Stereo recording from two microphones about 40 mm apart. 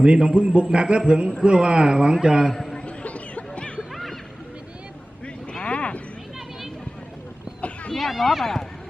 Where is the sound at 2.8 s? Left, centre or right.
Left.